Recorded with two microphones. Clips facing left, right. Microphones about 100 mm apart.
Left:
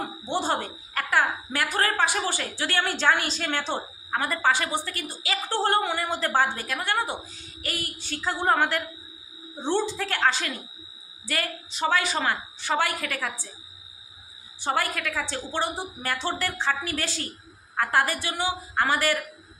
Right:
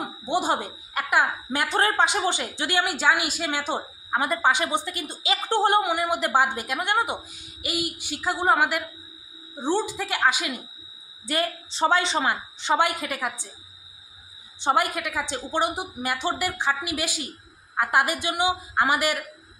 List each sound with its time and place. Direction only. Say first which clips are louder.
0.0 s a woman's voice: right 3 dB; 15° right (ahead or behind)
14.6 s speech: right 4 dB; 20° right (ahead or behind)